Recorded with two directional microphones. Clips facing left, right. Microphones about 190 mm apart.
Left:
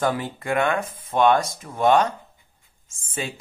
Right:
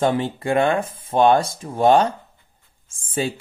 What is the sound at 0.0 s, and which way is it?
Speech, 25° right (ahead or behind).